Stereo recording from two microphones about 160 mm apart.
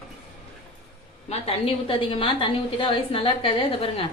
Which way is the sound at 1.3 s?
35° left (ahead or behind).